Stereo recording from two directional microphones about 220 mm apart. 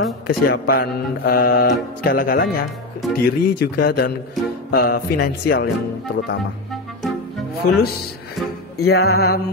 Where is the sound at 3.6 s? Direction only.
45° left (ahead or behind).